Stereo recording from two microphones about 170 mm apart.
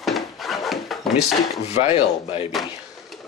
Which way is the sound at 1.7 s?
40° left (ahead or behind).